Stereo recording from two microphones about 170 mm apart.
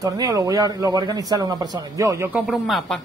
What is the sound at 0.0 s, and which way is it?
Speech, 20° right (ahead or behind).